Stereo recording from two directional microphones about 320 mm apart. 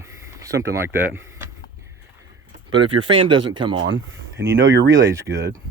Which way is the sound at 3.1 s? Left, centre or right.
Centre.